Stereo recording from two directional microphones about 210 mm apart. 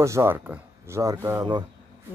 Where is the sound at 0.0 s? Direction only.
15° right (ahead or behind).